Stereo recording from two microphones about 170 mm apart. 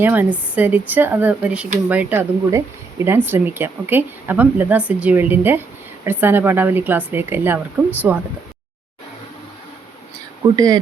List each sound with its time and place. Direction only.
0.0 s speech: 10° right (ahead or behind)
10.5 s speech: 20° right (ahead or behind)